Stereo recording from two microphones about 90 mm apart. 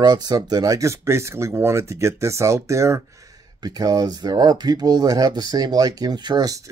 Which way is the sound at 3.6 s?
45° right (ahead or behind).